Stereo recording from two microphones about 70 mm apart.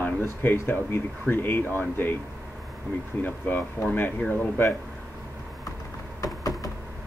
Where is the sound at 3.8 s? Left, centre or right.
Left.